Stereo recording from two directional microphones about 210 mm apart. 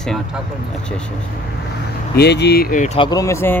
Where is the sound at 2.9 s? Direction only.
20° left (ahead or behind).